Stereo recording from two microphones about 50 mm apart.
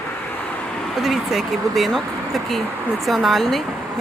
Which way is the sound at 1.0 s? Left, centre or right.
Centre.